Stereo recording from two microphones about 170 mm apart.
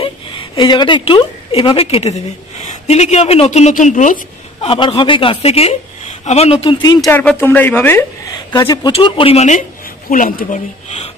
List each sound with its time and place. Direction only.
0.0 s a woman's voice: 30° left (ahead or behind); by 4.2 s 50° left (ahead or behind)
4.6 s a woman's voice: 30° left (ahead or behind)
7.1 s speech: 10° left (ahead or behind)
8.5 s speech: 25° left (ahead or behind); by 11.1 s 45° left (ahead or behind)